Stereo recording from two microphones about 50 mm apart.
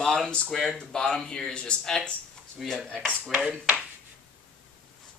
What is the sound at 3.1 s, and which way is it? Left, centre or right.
Speech, right.